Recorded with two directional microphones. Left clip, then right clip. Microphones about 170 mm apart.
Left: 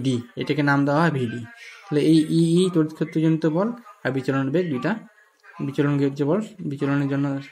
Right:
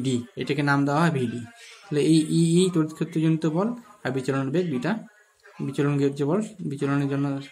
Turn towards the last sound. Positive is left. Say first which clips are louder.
# left 2 dB
turn(degrees=20)  # may be behind; listen again after turning